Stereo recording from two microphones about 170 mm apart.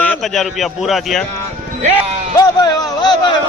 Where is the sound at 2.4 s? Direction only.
20° left (ahead or behind).